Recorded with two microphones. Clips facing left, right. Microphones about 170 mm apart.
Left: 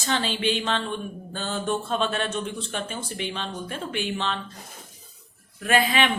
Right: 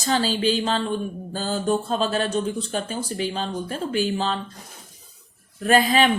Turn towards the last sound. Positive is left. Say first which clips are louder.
# right 4 dB
turn(degrees=-40)  # may be behind; listen again after turning